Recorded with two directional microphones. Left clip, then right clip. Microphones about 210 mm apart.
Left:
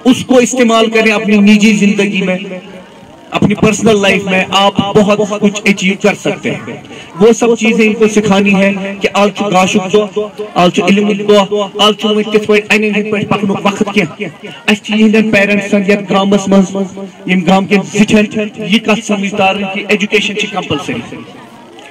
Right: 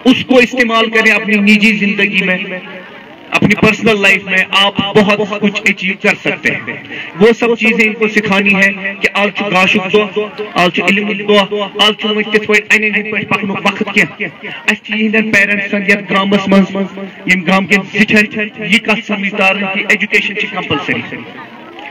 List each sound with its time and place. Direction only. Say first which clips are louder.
0.0 s a man's voice: even; 45° left (ahead or behind)